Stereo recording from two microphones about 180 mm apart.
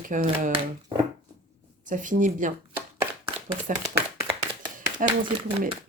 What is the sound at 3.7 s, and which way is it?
Speech, 45° right (ahead or behind).